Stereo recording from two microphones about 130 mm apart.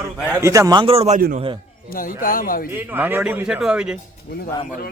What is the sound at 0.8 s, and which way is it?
Speech, 50° right (ahead or behind).